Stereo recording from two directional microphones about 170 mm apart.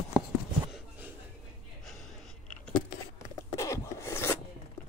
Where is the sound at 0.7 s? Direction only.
5° right (ahead or behind).